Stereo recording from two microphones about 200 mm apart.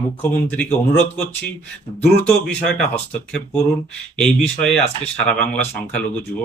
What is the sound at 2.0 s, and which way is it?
Speech, 5° left (ahead or behind).